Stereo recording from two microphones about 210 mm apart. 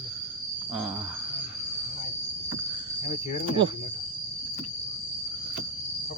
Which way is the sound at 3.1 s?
30° left (ahead or behind).